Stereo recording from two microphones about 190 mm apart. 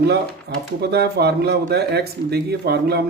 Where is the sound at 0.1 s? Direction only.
60° right (ahead or behind).